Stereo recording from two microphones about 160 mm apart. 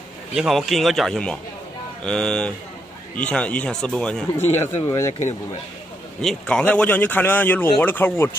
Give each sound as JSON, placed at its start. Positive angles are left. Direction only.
{"t": 0.4, "sound": "speech", "side_deg": 0}
{"t": 4.5, "sound": "speech", "side_deg": 15}
{"t": 6.2, "sound": "speech", "side_deg": 5}